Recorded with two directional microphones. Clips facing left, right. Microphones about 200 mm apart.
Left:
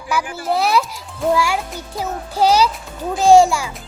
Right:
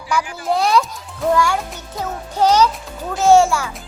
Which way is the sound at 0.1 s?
5° left (ahead or behind).